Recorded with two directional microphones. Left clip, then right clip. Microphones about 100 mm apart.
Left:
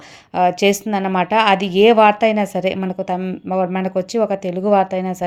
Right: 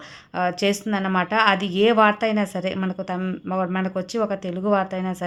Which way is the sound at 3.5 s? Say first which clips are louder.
Left 6 dB; 35° left (ahead or behind).